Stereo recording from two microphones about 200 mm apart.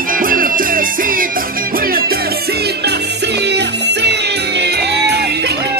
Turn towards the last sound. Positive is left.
turn(degrees=-55)  # may be behind; listen again after turning